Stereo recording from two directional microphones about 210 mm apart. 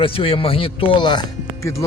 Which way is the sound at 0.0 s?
25° left (ahead or behind).